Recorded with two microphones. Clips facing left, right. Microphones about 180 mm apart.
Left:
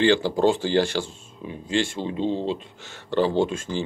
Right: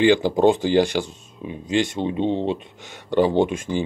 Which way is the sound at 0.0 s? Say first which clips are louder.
Right 3 dB; 15° right (ahead or behind).